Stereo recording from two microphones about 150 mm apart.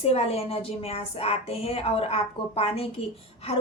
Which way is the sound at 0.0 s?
40° left (ahead or behind).